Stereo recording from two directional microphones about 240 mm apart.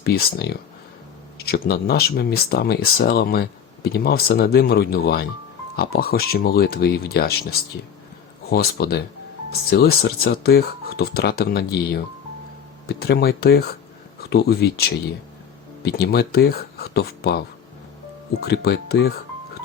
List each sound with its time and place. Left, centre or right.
0.0 s speech: left
8.4 s speech: left
18.4 s speech: left